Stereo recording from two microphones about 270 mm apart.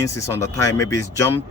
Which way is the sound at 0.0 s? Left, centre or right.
Centre.